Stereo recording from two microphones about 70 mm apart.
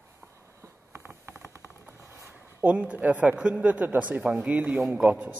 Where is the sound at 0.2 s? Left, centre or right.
Right.